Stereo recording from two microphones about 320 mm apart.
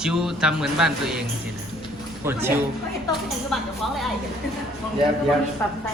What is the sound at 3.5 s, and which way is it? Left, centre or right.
Speech, centre.